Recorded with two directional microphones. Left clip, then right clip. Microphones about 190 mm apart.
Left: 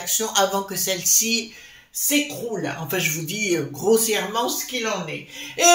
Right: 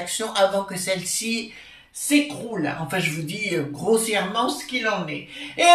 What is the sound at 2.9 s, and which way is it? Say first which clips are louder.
Speech: left 1 dB; 45° left (ahead or behind).